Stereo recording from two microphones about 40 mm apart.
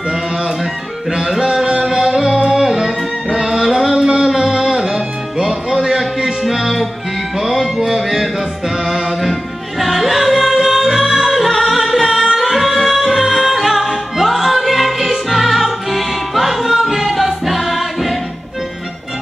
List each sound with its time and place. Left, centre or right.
1.1 s music: centre
6.4 s music: centre